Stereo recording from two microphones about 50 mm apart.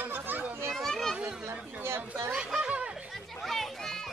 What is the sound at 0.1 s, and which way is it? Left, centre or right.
Children playing, right.